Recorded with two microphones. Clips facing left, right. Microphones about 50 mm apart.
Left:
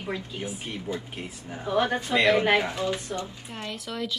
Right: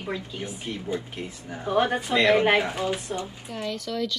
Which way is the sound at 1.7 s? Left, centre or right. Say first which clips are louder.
Right 2 dB; centre.